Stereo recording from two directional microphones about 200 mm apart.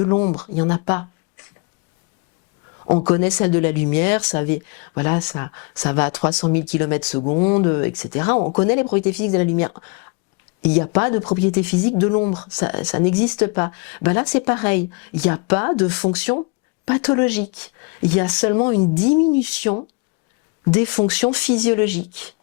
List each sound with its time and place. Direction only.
0.0 s speech: 15° left (ahead or behind)
2.8 s speech: 25° left (ahead or behind)